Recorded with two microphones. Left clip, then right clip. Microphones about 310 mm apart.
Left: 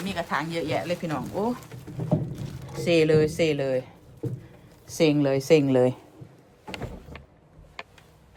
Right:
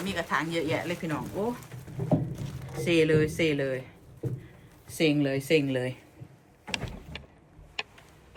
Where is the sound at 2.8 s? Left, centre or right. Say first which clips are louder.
Left 3 dB; centre.